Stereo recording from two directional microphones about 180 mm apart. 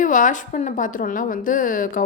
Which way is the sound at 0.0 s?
45° left (ahead or behind).